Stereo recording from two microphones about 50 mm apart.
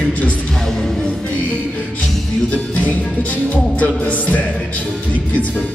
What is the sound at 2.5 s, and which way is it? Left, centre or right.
Music, left.